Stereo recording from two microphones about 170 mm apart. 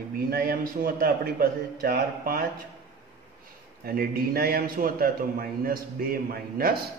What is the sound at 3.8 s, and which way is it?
A man's voice, 60° right (ahead or behind).